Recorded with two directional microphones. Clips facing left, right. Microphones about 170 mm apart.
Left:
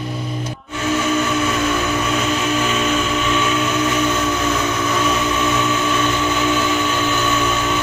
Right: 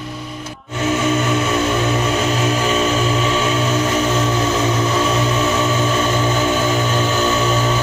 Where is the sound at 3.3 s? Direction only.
30° right (ahead or behind).